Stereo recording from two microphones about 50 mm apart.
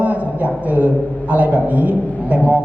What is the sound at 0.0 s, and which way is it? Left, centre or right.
A man's voice, right.